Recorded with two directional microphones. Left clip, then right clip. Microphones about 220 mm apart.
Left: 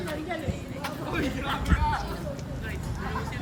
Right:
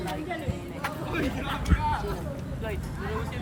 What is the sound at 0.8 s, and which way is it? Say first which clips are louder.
Vehicle: even; 5° left (ahead or behind).